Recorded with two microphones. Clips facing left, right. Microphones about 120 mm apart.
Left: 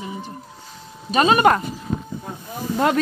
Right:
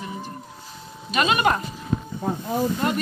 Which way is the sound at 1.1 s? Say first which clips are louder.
Left 5 dB; 35° left (ahead or behind).